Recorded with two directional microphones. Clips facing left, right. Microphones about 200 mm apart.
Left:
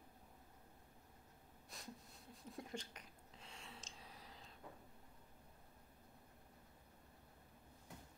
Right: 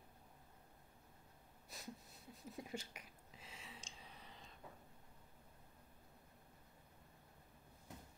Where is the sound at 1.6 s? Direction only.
5° right (ahead or behind).